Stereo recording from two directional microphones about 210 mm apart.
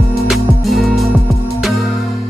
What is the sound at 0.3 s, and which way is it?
Music, centre (ahead or behind).